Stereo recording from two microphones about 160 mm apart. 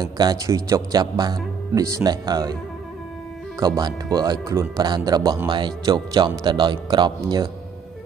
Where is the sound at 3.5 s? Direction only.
25° right (ahead or behind).